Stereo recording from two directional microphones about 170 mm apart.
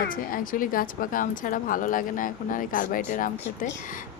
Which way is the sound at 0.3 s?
55° left (ahead or behind).